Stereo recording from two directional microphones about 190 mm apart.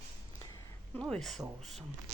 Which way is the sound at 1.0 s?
Centre (ahead or behind).